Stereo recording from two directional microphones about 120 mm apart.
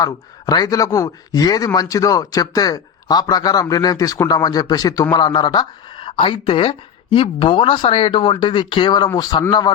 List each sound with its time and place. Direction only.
0.0 s a woman's voice: 30° left (ahead or behind)